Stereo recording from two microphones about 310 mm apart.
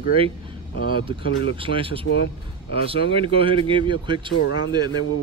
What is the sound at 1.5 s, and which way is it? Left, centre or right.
Speech, centre.